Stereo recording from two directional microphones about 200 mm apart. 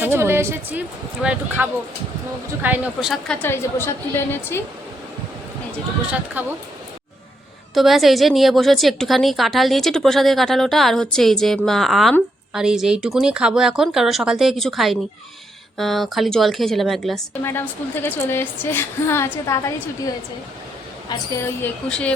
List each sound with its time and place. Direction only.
0.0 s a woman's voice: 10° right (ahead or behind)
3.4 s speech: 10° left (ahead or behind)
6.4 s a woman's voice: 10° right (ahead or behind)
7.7 s a woman's voice: centre (ahead or behind)
17.4 s speech: 10° left (ahead or behind)
21.1 s a woman's voice: 20° left (ahead or behind)
21.6 s a woman's voice: 5° left (ahead or behind)